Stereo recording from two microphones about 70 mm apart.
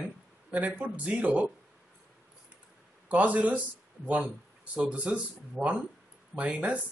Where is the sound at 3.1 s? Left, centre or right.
Right.